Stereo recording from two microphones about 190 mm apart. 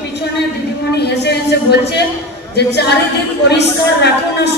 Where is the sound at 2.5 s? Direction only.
60° left (ahead or behind).